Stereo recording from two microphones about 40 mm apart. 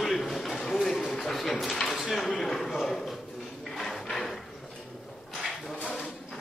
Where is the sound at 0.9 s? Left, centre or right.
Centre.